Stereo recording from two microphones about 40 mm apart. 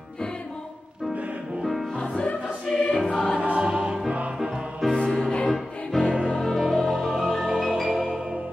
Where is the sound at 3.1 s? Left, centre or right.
Left.